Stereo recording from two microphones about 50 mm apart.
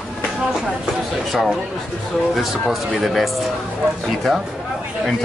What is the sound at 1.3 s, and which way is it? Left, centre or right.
Speech, centre.